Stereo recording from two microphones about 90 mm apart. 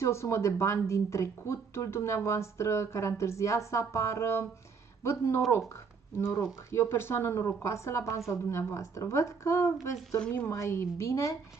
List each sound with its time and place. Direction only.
0.0 s speech: 30° left (ahead or behind)
10.1 s a woman's voice: 10° left (ahead or behind)
10.4 s speech: 30° left (ahead or behind)